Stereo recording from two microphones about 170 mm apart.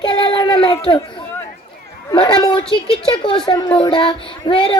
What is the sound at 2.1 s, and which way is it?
Speech, 25° left (ahead or behind).